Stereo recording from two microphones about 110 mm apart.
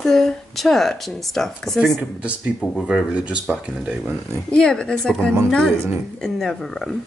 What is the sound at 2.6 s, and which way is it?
Speech, 5° left (ahead or behind).